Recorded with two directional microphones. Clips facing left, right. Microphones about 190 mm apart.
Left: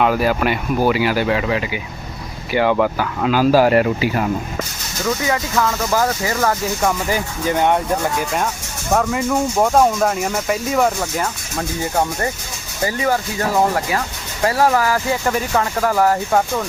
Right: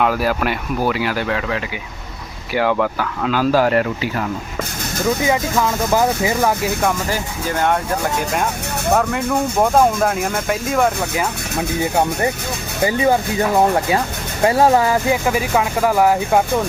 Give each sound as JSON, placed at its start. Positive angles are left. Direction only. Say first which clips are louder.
{"t": 0.0, "sound": "speech", "louder": "left 1 dB", "side_deg": 0}
{"t": 5.0, "sound": "speech", "louder": "right 2 dB", "side_deg": -15}
{"t": 7.1, "sound": "speech", "louder": "left 2 dB", "side_deg": 15}
{"t": 9.6, "sound": "speech", "louder": "even", "side_deg": 0}
{"t": 12.8, "sound": "speech", "louder": "right 3 dB", "side_deg": -20}
{"t": 14.4, "sound": "speech", "louder": "right 2 dB", "side_deg": -25}
{"t": 15.3, "sound": "speech", "louder": "right 1 dB", "side_deg": -10}